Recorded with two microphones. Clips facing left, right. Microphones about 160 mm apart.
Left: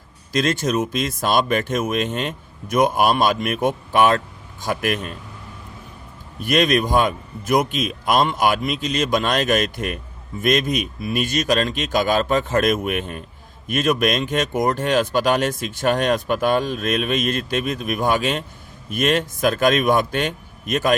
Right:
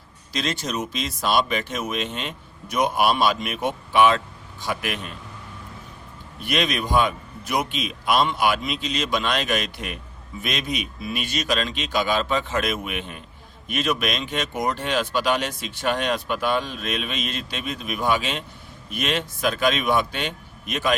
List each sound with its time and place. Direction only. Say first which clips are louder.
0.3 s speech: left 7 dB; 50° left (ahead or behind)
6.4 s speech: left 7 dB; 45° left (ahead or behind)